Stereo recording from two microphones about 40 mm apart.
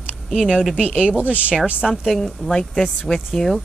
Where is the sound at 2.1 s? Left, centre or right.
Centre.